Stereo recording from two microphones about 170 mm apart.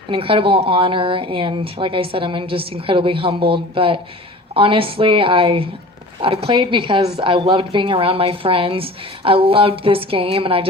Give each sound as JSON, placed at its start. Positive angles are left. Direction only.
{"t": 0.1, "sound": "a woman's voice", "side_deg": -30}